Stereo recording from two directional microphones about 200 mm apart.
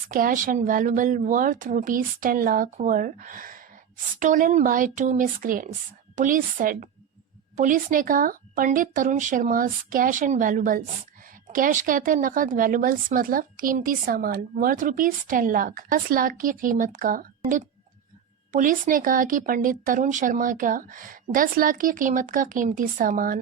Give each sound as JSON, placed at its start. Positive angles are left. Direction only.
{"t": 0.1, "sound": "speech", "side_deg": -45}
{"t": 18.5, "sound": "speech", "side_deg": -40}